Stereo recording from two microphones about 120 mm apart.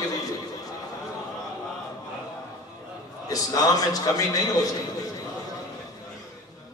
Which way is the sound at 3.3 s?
30° left (ahead or behind).